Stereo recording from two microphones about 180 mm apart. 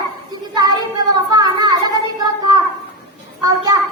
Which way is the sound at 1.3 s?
20° right (ahead or behind).